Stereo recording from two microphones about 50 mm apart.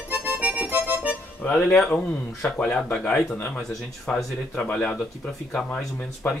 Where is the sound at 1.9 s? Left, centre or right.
Left.